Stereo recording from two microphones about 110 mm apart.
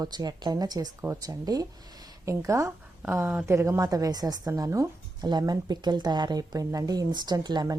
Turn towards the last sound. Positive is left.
turn(degrees=-40)  # may be behind; listen again after turning